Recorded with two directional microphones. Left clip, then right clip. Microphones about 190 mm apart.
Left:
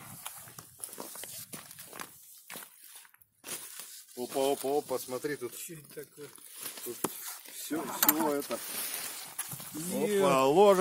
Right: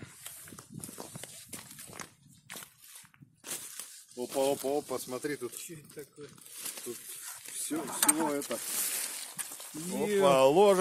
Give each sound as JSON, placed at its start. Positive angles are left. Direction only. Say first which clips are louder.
{"t": 0.6, "sound": "walk", "louder": "even", "side_deg": 0}
{"t": 3.4, "sound": "a sound", "louder": "right 1 dB", "side_deg": -5}
{"t": 4.6, "sound": "speech", "louder": "left 1 dB", "side_deg": -10}
{"t": 6.5, "sound": "a sound", "louder": "right 1 dB", "side_deg": -10}
{"t": 7.8, "sound": "speech", "louder": "left 1 dB", "side_deg": 15}
{"t": 8.3, "sound": "speech", "louder": "left 1 dB", "side_deg": 0}
{"t": 8.6, "sound": "a sound", "louder": "right 2 dB", "side_deg": -15}
{"t": 9.9, "sound": "speech", "louder": "even", "side_deg": 5}
{"t": 10.2, "sound": "speech", "louder": "right 1 dB", "side_deg": -15}